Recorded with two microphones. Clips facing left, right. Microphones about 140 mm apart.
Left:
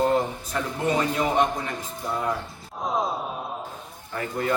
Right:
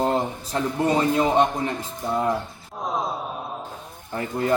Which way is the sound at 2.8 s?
Centre (ahead or behind).